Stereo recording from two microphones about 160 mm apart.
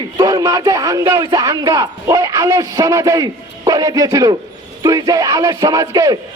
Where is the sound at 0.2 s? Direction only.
25° right (ahead or behind).